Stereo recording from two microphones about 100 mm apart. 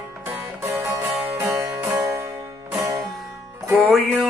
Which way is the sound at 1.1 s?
10° right (ahead or behind).